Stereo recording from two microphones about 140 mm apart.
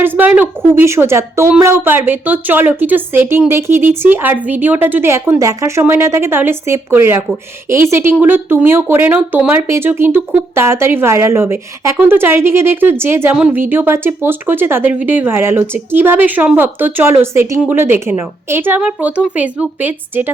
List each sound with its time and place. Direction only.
0.0 s a woman's voice: 10° right (ahead or behind)